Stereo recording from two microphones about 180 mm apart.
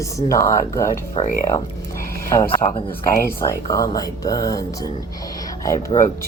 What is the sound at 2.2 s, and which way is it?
Speech, 15° left (ahead or behind).